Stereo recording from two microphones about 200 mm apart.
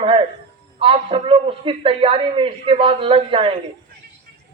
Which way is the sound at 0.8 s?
25° right (ahead or behind).